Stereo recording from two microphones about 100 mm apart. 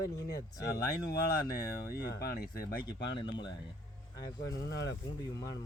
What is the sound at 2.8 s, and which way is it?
Speech, 50° left (ahead or behind).